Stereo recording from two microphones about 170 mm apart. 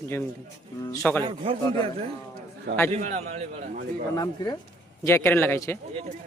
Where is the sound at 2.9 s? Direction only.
40° right (ahead or behind).